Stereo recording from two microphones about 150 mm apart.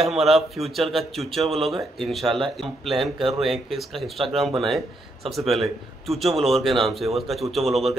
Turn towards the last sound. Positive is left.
turn(degrees=0)  # may be behind; listen again after turning